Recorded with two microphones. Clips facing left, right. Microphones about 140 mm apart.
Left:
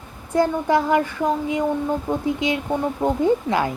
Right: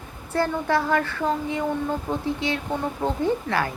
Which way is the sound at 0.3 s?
15° left (ahead or behind).